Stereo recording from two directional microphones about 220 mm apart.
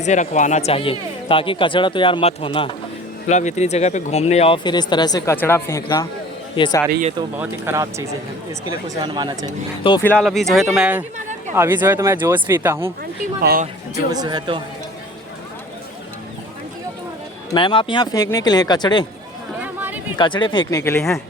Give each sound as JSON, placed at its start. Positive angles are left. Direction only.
{"t": 0.0, "sound": "speech", "side_deg": 35}
{"t": 7.3, "sound": "speech", "side_deg": -10}
{"t": 10.0, "sound": "speech", "side_deg": 5}
{"t": 13.4, "sound": "speech", "side_deg": -45}
{"t": 13.9, "sound": "speech", "side_deg": -15}
{"t": 17.5, "sound": "speech", "side_deg": 20}
{"t": 19.6, "sound": "a sound", "side_deg": -10}
{"t": 20.1, "sound": "speech", "side_deg": 20}